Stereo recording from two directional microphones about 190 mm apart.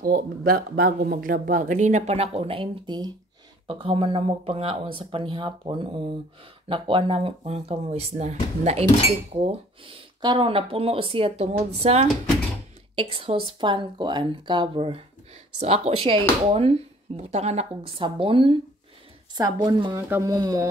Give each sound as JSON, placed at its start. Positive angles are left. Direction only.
{"t": 0.0, "sound": "speech", "side_deg": -50}